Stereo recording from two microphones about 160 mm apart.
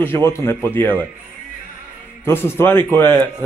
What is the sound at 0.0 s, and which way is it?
Speech, 15° left (ahead or behind).